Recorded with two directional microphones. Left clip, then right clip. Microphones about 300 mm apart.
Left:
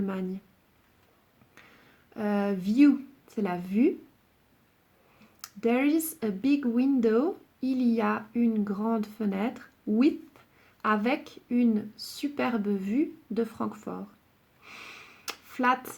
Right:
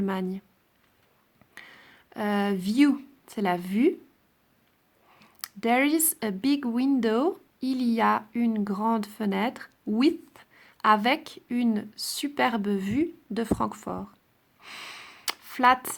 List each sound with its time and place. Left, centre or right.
0.0 s speech: right
2.1 s speech: right
5.4 s speech: right
14.6 s a sound: right